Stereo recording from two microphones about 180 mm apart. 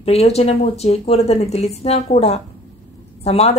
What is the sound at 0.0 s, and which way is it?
A woman's voice, 35° left (ahead or behind).